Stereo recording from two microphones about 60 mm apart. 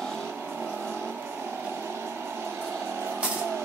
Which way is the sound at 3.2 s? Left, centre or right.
Centre.